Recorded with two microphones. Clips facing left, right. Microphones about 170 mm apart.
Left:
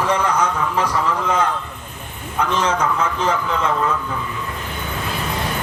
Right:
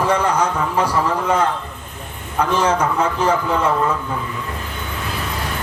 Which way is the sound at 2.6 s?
30° right (ahead or behind).